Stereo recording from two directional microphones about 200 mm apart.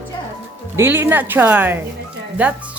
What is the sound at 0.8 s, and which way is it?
Speech, 10° right (ahead or behind).